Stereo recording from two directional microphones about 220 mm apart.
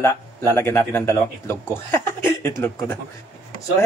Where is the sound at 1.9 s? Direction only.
10° left (ahead or behind).